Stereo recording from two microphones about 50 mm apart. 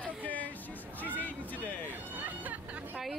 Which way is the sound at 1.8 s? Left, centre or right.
Right.